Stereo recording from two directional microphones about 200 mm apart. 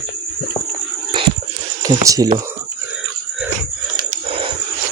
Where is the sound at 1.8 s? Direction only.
15° right (ahead or behind).